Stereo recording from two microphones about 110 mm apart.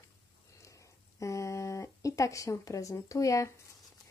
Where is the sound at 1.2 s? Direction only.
30° left (ahead or behind).